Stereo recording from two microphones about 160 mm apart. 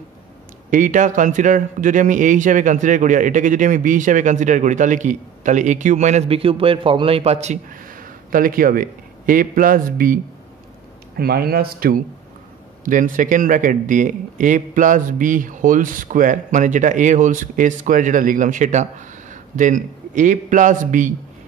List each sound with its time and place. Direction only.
0.7 s a man's voice: 55° right (ahead or behind)
7.9 s a man's voice: 60° right (ahead or behind)
11.1 s a man's voice: 75° right (ahead or behind)
12.8 s a man's voice: 55° right (ahead or behind)